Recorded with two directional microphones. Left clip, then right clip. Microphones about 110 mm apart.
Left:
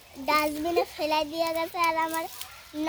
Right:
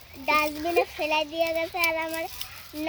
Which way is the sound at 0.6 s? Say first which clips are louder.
Right 2 dB; 25° left (ahead or behind).